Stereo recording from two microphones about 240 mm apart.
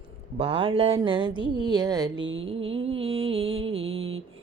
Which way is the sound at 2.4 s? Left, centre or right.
Right.